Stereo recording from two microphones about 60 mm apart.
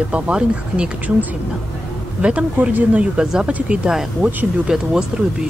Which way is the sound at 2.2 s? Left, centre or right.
Right.